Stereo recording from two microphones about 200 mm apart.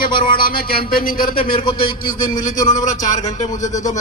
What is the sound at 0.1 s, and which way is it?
Speech, 25° left (ahead or behind).